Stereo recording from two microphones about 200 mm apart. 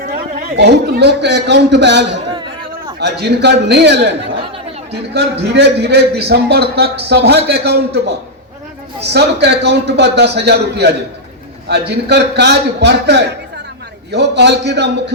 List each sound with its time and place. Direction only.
0.0 s a man's voice: 55° right (ahead or behind)
2.3 s a sound: 20° right (ahead or behind)
3.0 s a man's voice: 55° right (ahead or behind)
5.1 s a man's voice: 55° right (ahead or behind)
9.1 s a man's voice: 55° right (ahead or behind)